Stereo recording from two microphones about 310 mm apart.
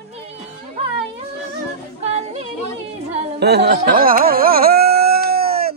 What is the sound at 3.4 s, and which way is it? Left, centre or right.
Carnatic music, right.